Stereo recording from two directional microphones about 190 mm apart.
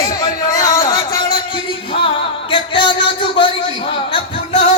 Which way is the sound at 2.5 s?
25° left (ahead or behind).